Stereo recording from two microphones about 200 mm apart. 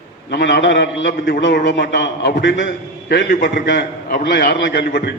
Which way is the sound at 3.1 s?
50° left (ahead or behind).